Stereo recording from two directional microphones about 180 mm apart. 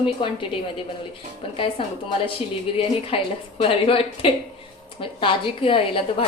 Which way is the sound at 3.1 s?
30° left (ahead or behind).